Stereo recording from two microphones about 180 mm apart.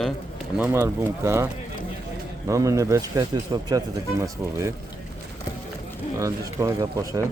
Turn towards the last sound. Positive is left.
turn(degrees=-20)  # may be behind; listen again after turning